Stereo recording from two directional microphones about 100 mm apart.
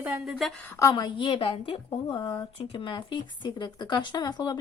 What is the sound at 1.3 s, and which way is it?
Speech, 65° left (ahead or behind).